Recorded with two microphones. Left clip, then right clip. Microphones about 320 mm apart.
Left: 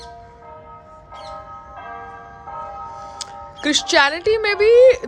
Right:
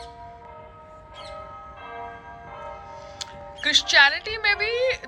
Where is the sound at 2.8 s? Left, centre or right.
Left.